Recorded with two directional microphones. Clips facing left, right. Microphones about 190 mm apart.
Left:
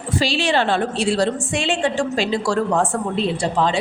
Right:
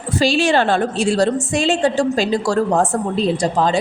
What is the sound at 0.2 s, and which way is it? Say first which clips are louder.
A woman's voice: right 4 dB; 45° right (ahead or behind).